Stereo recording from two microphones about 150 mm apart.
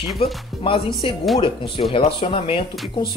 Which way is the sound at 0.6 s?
35° left (ahead or behind).